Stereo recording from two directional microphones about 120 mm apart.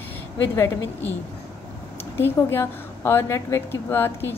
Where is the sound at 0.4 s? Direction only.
20° left (ahead or behind).